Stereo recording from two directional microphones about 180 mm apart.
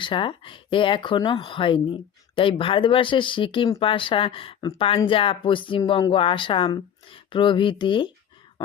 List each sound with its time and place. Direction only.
0.0 s speech: 30° left (ahead or behind)